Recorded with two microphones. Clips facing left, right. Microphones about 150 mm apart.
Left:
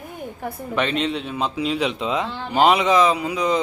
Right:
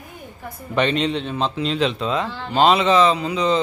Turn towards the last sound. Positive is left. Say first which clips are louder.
# right 1 dB
turn(degrees=10)  # may be behind; listen again after turning